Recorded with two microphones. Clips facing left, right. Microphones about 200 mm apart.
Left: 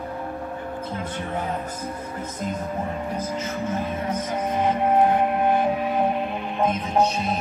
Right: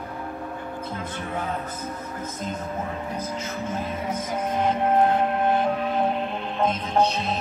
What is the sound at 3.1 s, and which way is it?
Music, 10° left (ahead or behind).